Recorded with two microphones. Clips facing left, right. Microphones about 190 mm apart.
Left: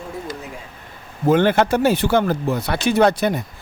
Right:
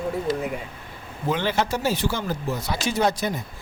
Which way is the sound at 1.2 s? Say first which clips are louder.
Left 9 dB; 50° left (ahead or behind).